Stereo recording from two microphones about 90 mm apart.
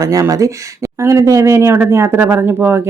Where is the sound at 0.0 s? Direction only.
40° right (ahead or behind).